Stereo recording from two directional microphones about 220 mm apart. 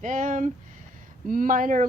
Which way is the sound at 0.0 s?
35° right (ahead or behind).